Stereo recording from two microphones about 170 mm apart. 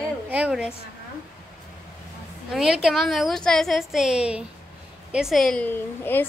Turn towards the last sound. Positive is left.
turn(degrees=10)  # may be behind; listen again after turning